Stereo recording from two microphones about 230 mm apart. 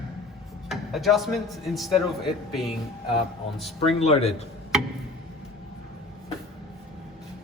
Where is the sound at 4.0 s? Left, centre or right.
Left.